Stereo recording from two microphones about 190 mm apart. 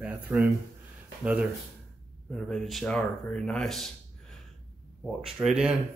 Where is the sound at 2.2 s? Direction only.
Centre (ahead or behind).